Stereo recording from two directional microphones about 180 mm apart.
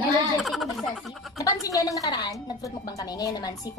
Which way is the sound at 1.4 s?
20° left (ahead or behind).